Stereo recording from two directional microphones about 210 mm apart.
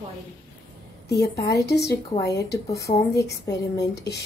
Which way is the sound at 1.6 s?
50° left (ahead or behind).